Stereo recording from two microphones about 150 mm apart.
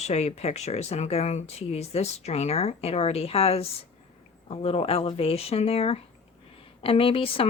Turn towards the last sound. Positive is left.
turn(degrees=35)  # may be behind; listen again after turning